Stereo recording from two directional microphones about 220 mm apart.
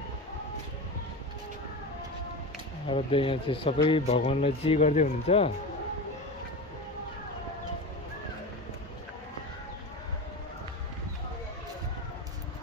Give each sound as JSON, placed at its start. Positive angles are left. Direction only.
{"t": 2.9, "sound": "speech", "side_deg": 25}